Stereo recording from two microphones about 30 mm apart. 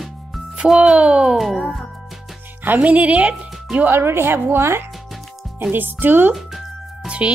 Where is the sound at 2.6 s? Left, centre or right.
Right.